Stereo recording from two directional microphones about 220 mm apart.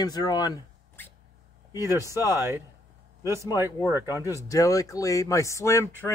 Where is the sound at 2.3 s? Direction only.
10° right (ahead or behind).